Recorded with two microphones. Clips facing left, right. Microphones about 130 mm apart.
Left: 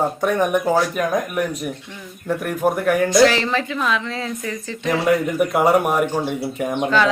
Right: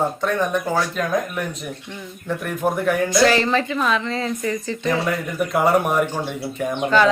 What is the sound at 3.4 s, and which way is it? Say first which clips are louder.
Speech: right 2 dB; centre (ahead or behind).